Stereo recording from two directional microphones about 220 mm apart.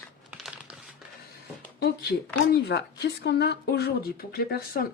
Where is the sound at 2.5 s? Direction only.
50° left (ahead or behind).